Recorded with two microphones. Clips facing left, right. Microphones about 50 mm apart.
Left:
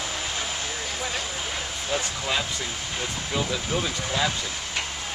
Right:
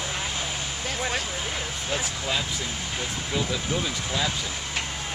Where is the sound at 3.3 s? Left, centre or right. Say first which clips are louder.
Left 1 dB; centre.